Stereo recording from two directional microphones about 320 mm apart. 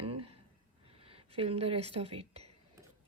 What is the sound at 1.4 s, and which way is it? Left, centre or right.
A woman's voice, centre.